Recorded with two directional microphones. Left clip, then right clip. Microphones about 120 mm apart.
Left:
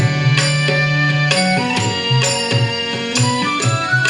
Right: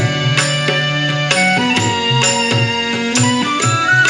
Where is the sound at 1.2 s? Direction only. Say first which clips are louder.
Right 3 dB; 40° right (ahead or behind).